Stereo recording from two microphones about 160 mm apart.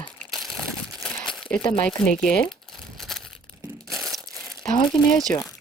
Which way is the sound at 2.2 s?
5° left (ahead or behind).